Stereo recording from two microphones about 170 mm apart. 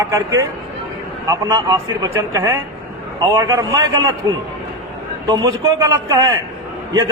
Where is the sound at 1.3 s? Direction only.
25° right (ahead or behind).